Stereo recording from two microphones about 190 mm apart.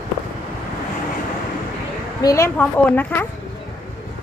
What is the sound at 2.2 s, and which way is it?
A woman's voice, 20° left (ahead or behind).